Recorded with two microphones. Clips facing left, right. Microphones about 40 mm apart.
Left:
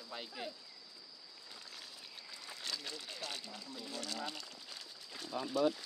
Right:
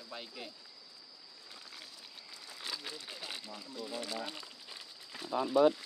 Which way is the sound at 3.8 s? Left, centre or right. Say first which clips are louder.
Right 3 dB; centre.